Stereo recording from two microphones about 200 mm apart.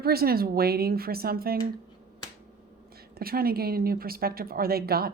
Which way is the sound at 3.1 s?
50° right (ahead or behind).